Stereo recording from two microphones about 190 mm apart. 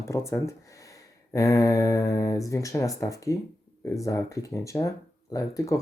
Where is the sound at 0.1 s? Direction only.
15° left (ahead or behind).